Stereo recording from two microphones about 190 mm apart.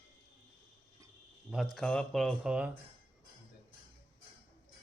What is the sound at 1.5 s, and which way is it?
Speech, centre (ahead or behind).